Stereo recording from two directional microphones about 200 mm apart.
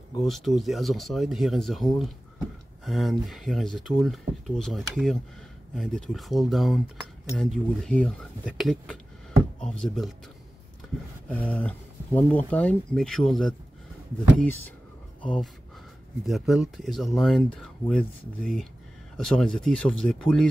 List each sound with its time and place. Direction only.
0.2 s speech: centre (ahead or behind)
11.2 s speech: 5° left (ahead or behind)